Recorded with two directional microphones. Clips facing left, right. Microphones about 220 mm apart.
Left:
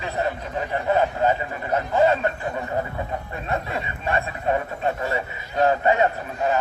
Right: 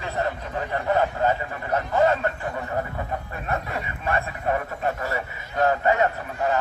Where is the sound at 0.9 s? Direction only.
15° left (ahead or behind).